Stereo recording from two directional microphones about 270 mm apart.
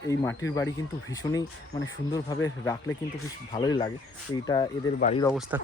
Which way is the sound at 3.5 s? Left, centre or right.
Centre.